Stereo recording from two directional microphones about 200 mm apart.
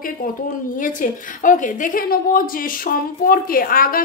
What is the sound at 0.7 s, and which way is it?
A woman's voice, 40° left (ahead or behind).